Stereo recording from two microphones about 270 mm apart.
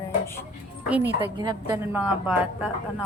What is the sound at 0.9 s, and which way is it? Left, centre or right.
Speech, centre.